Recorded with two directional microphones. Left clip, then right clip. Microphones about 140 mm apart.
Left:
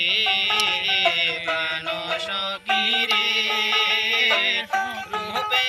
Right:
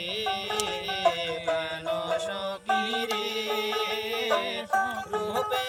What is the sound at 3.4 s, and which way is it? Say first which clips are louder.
Music: left 8 dB; 55° right (ahead or behind).